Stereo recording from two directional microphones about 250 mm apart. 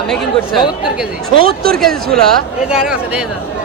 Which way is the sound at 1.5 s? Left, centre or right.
Right.